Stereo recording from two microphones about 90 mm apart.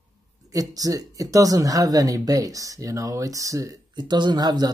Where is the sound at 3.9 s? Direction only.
55° right (ahead or behind).